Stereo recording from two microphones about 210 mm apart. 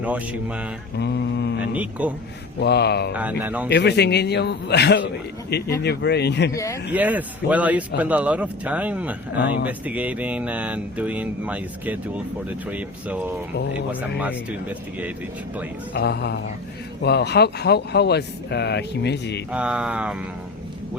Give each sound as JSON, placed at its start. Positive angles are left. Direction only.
{"t": 0.0, "sound": "speech", "side_deg": -5}
{"t": 0.9, "sound": "mantra", "side_deg": 55}
{"t": 1.7, "sound": "speech", "side_deg": -5}
{"t": 2.6, "sound": "speech", "side_deg": 50}
{"t": 3.1, "sound": "speech", "side_deg": -5}
{"t": 3.7, "sound": "speech", "side_deg": 55}
{"t": 6.9, "sound": "speech", "side_deg": -5}
{"t": 16.0, "sound": "speech", "side_deg": 50}
{"t": 19.5, "sound": "a sound", "side_deg": -5}